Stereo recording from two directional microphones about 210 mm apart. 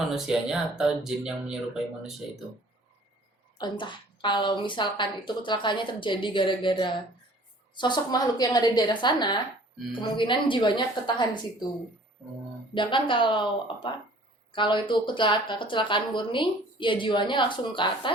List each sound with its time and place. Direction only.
0.1 s speech: 5° right (ahead or behind)
3.6 s a woman's voice: 20° left (ahead or behind)
12.7 s a woman's voice: 25° left (ahead or behind)